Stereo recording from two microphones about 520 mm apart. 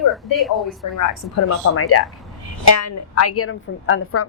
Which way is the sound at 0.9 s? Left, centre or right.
Left.